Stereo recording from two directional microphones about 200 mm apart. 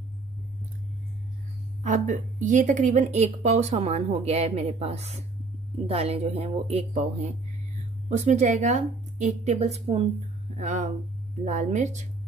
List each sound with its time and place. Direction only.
1.8 s speech: 40° right (ahead or behind)
8.1 s speech: 35° right (ahead or behind)